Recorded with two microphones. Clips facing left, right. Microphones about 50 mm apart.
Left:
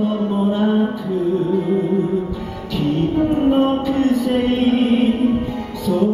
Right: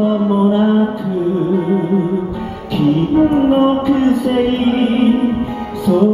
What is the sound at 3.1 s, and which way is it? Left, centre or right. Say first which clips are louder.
Music: right 4 dB; right.